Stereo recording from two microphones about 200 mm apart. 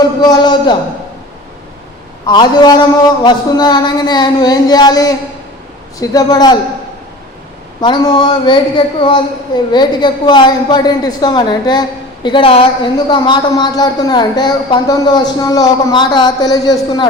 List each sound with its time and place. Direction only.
0.2 s a woman's voice: 20° left (ahead or behind)
2.2 s a woman's voice: 20° left (ahead or behind)
7.8 s a woman's voice: 20° left (ahead or behind)